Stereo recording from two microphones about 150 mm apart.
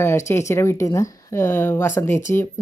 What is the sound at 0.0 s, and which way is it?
A woman's voice, 15° left (ahead or behind).